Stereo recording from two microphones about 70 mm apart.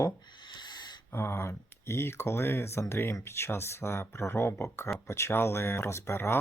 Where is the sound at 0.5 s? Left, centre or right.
Left.